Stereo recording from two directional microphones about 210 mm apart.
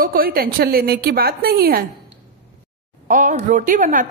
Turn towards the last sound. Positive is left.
turn(degrees=-40)  # may be behind; listen again after turning